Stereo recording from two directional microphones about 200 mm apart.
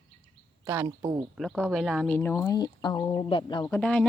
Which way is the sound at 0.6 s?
15° right (ahead or behind).